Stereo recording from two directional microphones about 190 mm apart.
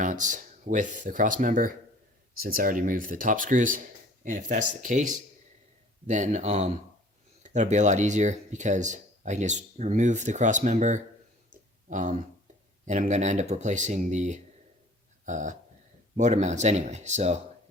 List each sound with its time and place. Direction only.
0.0 s speech: 40° right (ahead or behind)
11.5 s clicking: 40° right (ahead or behind)
12.8 s speech: 40° right (ahead or behind)